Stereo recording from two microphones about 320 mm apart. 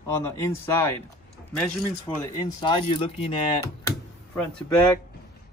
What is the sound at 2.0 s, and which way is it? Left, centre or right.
Speech, centre.